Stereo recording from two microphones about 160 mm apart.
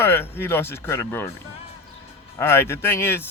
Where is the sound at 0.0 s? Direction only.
15° left (ahead or behind).